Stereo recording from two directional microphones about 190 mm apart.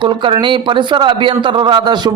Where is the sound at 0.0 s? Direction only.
25° right (ahead or behind).